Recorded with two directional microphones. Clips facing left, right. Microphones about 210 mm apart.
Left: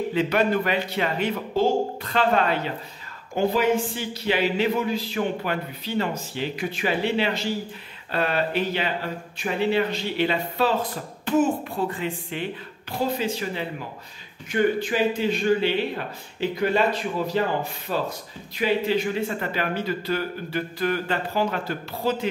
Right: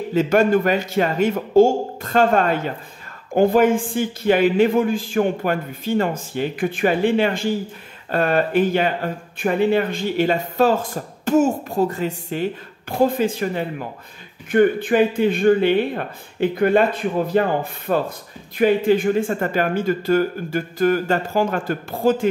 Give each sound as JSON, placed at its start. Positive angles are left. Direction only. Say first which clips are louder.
{"t": 0.1, "sound": "speech", "louder": "right 8 dB", "side_deg": -45}